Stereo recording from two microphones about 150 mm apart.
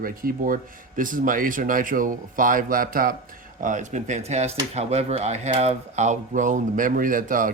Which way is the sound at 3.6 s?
55° right (ahead or behind).